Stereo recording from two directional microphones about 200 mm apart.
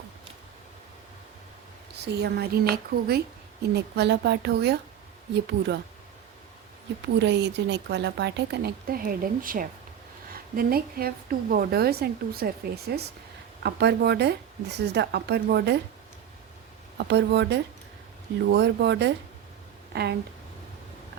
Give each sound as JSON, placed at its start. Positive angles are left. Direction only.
{"t": 2.0, "sound": "a woman's voice", "side_deg": -55}
{"t": 7.2, "sound": "a woman's voice", "side_deg": -60}
{"t": 17.0, "sound": "speech", "side_deg": -60}